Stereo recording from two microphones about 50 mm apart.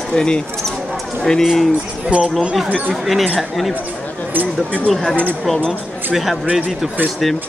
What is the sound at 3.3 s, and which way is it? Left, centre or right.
Speech, centre.